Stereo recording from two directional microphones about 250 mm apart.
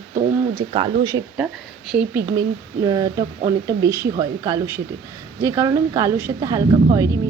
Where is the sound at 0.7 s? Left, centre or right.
Centre.